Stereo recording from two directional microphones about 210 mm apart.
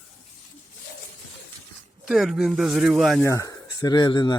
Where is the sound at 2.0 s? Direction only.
Centre (ahead or behind).